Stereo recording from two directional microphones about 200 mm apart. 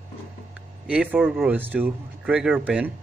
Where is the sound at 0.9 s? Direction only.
5° right (ahead or behind).